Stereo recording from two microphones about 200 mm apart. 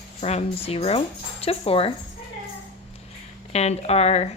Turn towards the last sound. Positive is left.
turn(degrees=30)  # may be behind; listen again after turning